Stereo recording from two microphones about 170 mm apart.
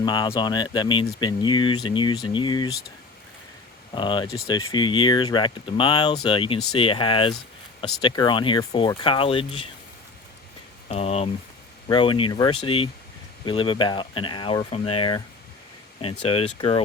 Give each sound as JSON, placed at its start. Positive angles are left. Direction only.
{"t": 0.0, "sound": "speech", "side_deg": 25}
{"t": 3.9, "sound": "speech", "side_deg": 25}
{"t": 10.8, "sound": "speech", "side_deg": 40}
{"t": 16.2, "sound": "speech", "side_deg": 35}